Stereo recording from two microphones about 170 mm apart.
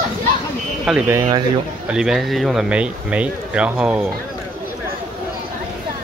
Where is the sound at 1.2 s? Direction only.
25° right (ahead or behind).